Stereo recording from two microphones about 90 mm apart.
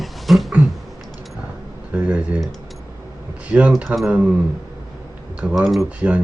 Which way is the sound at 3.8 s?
Centre (ahead or behind).